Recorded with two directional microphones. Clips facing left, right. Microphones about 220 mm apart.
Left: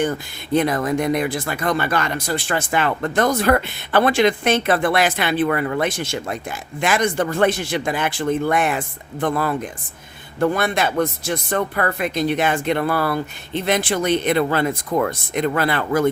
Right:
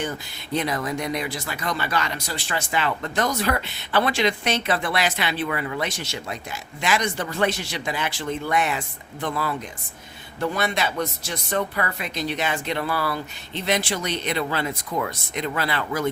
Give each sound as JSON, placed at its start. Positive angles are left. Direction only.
{"t": 0.0, "sound": "speech", "side_deg": 50}